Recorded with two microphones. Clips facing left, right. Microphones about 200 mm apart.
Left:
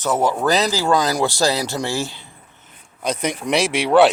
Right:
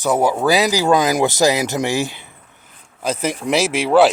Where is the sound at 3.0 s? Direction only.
5° right (ahead or behind).